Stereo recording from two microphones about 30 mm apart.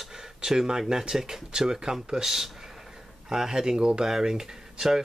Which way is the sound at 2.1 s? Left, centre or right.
Centre.